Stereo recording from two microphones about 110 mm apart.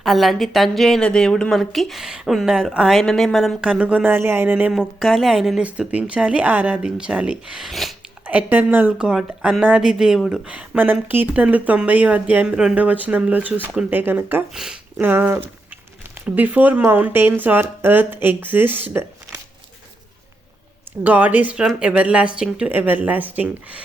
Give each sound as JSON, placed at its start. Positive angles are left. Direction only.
{"t": 0.0, "sound": "a woman's voice", "side_deg": 0}
{"t": 4.7, "sound": "a woman's voice", "side_deg": 0}
{"t": 8.3, "sound": "speech", "side_deg": -15}
{"t": 14.5, "sound": "speech", "side_deg": -5}
{"t": 15.0, "sound": "speech", "side_deg": -20}
{"t": 21.0, "sound": "speech", "side_deg": -15}